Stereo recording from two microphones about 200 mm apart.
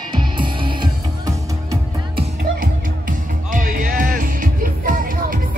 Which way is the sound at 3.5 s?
40° right (ahead or behind).